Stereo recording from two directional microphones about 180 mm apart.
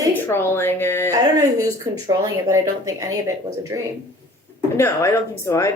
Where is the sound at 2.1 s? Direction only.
20° right (ahead or behind).